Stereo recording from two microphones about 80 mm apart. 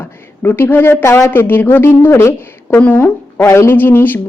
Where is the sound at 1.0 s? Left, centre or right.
Left.